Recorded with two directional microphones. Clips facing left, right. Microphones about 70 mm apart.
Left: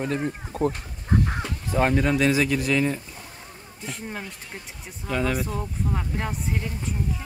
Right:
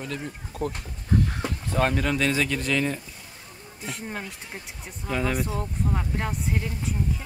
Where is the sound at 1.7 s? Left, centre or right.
Centre.